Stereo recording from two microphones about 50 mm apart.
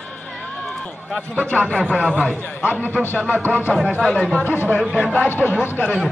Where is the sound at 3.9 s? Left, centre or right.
Centre.